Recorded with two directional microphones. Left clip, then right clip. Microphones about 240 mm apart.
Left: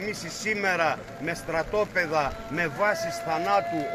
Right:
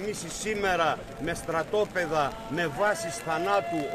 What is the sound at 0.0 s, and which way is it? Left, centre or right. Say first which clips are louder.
A man's voice: left 2 dB; centre.